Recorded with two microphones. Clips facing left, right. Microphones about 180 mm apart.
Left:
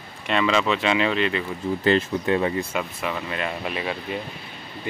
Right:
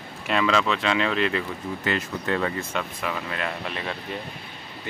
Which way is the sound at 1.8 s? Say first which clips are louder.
Left 8 dB; 30° left (ahead or behind).